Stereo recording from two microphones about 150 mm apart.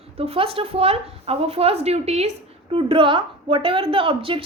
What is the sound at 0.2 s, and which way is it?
A woman's voice, 40° right (ahead or behind).